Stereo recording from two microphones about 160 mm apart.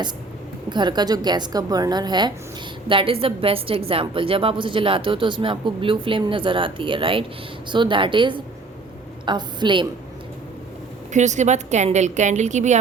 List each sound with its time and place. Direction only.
0.7 s a woman's voice: 30° right (ahead or behind)
11.1 s a woman's voice: 50° right (ahead or behind)